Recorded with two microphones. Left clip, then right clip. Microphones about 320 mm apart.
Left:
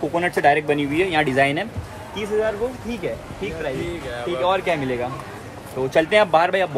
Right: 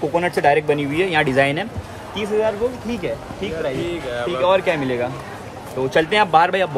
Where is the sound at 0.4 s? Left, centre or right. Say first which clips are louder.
Right 1 dB; centre.